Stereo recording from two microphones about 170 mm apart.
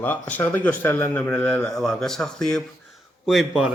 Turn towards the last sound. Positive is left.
turn(degrees=0)  # may be behind; listen again after turning